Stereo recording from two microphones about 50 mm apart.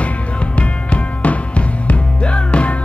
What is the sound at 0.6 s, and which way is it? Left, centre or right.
Music, left.